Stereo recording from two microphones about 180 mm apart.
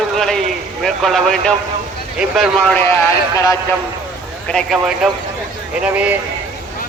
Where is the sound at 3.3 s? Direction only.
20° left (ahead or behind).